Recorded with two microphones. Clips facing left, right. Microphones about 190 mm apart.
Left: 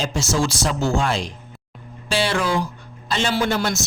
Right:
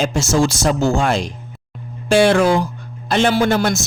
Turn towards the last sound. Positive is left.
turn(degrees=-50)  # may be behind; listen again after turning